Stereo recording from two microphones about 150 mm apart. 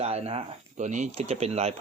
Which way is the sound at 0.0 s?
45° right (ahead or behind).